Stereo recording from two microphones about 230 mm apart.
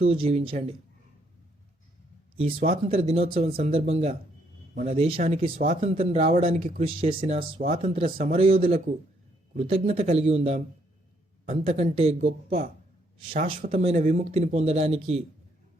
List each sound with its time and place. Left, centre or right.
0.0 s speech: right
2.4 s speech: right
8.4 s speech: right
11.6 s speech: right